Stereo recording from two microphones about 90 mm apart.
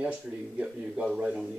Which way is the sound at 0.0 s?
10° right (ahead or behind).